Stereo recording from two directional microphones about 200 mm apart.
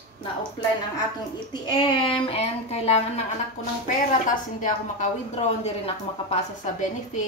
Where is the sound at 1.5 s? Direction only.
25° left (ahead or behind).